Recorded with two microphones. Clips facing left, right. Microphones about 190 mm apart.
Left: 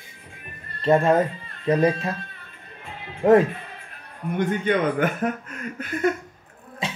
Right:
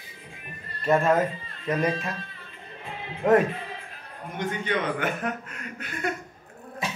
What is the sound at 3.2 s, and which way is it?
Speech, 30° left (ahead or behind).